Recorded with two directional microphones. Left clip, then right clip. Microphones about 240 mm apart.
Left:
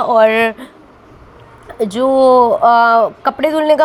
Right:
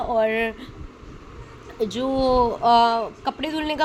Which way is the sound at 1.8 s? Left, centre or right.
Left.